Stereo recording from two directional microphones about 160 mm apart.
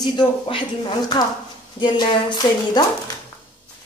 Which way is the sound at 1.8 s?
30° left (ahead or behind).